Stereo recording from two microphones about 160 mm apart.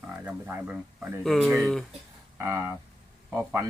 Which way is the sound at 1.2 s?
Centre (ahead or behind).